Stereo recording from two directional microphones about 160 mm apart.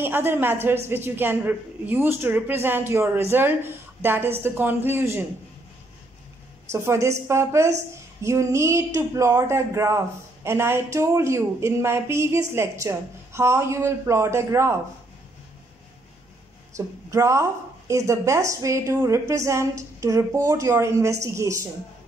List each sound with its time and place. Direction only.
0.0 s speech: 15° right (ahead or behind)
6.7 s speech: 15° right (ahead or behind)
16.7 s a woman's voice: 20° right (ahead or behind)